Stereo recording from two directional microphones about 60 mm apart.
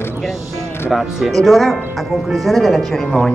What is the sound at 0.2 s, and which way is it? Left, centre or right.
Speech, centre.